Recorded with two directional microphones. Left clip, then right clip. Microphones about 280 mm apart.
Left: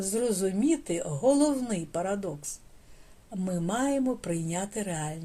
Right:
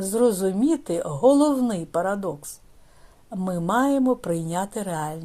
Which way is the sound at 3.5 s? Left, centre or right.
Right.